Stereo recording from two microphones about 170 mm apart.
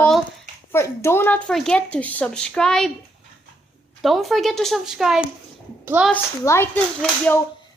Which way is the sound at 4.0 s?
Centre (ahead or behind).